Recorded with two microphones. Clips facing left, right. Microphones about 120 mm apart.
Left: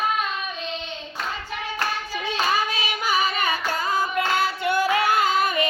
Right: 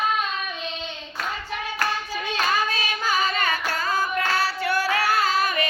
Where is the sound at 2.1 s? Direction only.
15° left (ahead or behind).